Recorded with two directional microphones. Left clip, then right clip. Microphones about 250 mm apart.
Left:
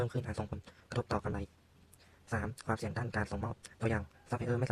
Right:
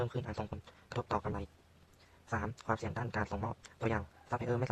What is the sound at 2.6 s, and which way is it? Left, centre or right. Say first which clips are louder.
Speech: right 1 dB; centre.